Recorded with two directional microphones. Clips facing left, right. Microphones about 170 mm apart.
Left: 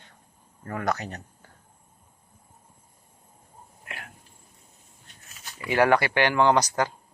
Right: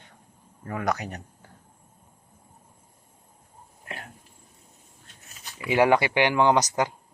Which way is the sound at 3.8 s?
35° right (ahead or behind).